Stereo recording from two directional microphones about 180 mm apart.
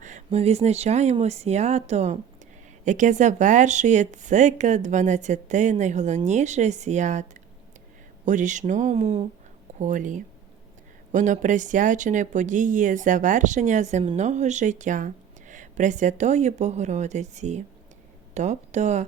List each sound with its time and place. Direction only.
0.0 s speech: 40° right (ahead or behind)